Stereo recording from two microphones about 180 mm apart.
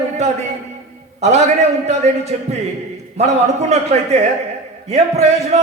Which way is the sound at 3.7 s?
40° right (ahead or behind).